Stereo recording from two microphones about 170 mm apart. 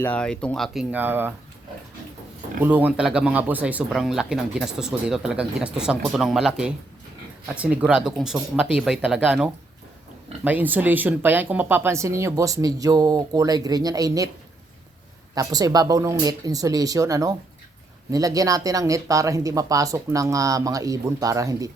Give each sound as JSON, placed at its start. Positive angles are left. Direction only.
{"t": 0.0, "sound": "speech", "side_deg": 5}
{"t": 2.6, "sound": "speech", "side_deg": -10}
{"t": 15.4, "sound": "speech", "side_deg": -20}